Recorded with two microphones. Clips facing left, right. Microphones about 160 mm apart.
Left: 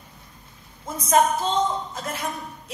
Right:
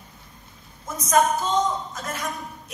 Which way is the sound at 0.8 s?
30° left (ahead or behind).